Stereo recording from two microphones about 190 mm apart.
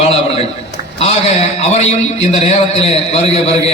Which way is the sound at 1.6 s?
35° left (ahead or behind).